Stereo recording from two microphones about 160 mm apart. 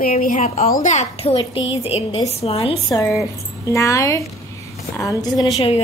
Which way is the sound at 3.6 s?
20° left (ahead or behind).